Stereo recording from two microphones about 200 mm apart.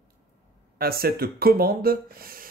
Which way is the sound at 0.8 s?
50° right (ahead or behind).